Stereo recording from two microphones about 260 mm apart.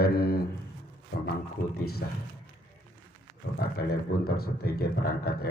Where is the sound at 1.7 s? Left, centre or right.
Left.